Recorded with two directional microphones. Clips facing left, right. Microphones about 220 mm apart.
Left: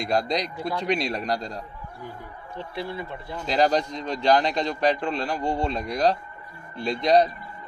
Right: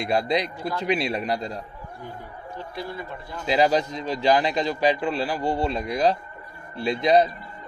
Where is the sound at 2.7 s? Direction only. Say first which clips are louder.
Left 2 dB; 25° left (ahead or behind).